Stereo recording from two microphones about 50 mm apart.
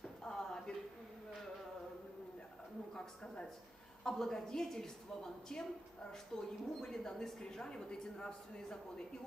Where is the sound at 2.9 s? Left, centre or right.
Centre.